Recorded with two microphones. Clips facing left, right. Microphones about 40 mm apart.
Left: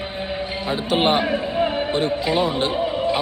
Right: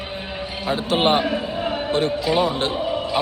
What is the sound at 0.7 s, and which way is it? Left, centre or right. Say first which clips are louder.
Speech: even; centre.